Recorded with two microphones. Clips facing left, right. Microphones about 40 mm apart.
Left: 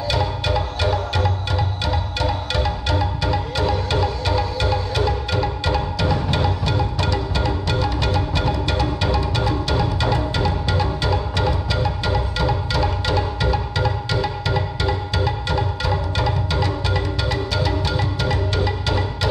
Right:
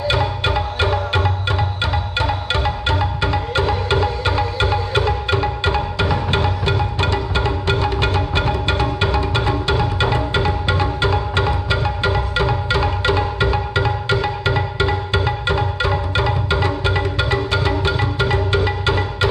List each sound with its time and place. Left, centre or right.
0.1 s music: right